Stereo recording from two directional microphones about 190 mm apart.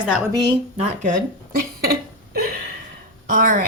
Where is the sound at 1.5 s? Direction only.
55° right (ahead or behind).